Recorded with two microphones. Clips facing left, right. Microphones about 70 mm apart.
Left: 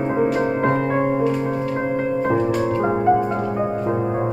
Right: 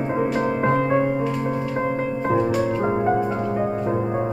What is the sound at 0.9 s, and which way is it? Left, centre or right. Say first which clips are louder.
Music: even; left.